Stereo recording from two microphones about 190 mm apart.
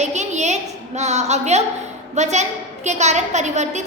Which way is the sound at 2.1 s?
35° right (ahead or behind).